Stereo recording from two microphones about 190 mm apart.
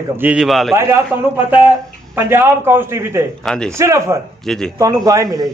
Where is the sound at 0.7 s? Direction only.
15° right (ahead or behind).